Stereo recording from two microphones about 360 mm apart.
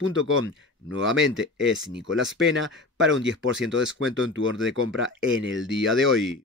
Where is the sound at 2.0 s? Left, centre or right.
Right.